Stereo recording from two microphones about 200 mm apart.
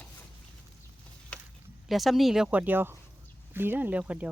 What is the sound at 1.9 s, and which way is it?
Speech, centre (ahead or behind).